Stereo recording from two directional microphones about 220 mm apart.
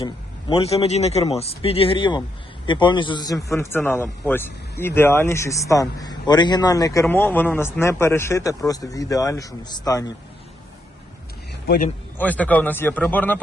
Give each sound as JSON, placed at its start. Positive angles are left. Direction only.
{"t": 0.0, "sound": "a man's voice", "side_deg": 20}
{"t": 12.1, "sound": "a man's voice", "side_deg": 5}